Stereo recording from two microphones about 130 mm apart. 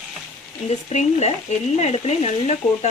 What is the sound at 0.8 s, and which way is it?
Stir, 60° left (ahead or behind).